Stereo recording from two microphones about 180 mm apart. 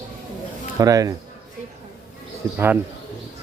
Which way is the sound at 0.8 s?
20° right (ahead or behind).